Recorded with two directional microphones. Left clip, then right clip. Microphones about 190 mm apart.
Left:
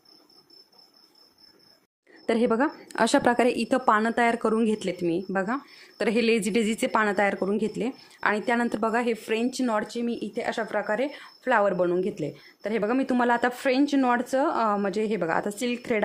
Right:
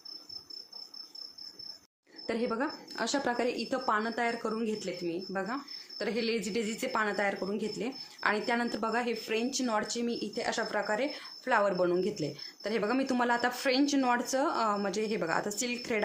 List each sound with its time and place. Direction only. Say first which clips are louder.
2.2 s a woman's voice: left 9 dB; 45° left (ahead or behind)